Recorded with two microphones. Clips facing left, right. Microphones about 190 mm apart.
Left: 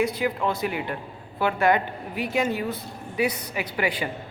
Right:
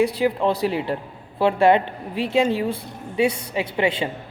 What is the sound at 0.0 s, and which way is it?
A woman's voice, 30° right (ahead or behind).